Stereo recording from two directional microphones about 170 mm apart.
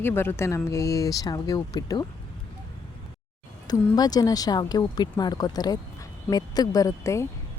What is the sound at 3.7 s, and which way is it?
A woman's voice, 25° left (ahead or behind).